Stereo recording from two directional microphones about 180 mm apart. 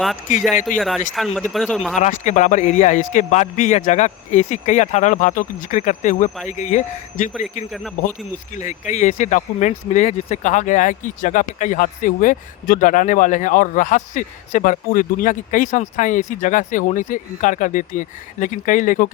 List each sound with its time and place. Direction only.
0.8 s speech: centre (ahead or behind)
2.0 s speech: 40° left (ahead or behind)
8.5 s speech: 40° left (ahead or behind)